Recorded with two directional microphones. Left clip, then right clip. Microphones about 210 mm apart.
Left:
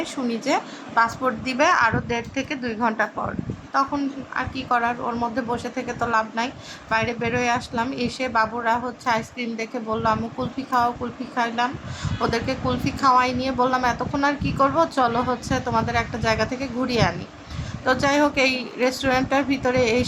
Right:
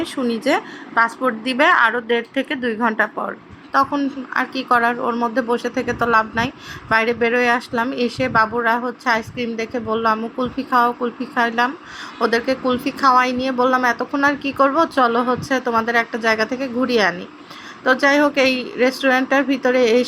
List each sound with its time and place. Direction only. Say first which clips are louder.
0.0 s a woman's voice: right 5 dB; 15° right (ahead or behind)